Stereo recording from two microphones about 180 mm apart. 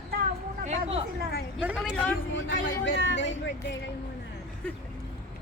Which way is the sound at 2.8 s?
80° left.